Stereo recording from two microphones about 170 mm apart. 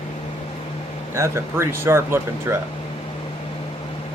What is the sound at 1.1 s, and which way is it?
Speech, 15° right (ahead or behind).